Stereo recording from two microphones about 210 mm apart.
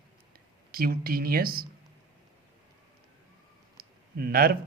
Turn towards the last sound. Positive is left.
turn(degrees=-45)  # may be behind; listen again after turning